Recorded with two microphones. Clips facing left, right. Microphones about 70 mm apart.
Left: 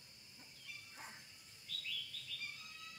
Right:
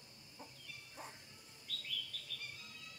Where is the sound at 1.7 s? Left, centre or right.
Right.